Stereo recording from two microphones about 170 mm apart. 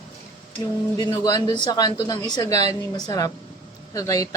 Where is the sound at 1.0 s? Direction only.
25° left (ahead or behind).